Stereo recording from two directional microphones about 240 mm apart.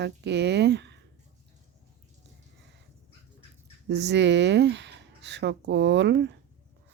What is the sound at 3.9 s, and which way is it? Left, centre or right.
Speech, right.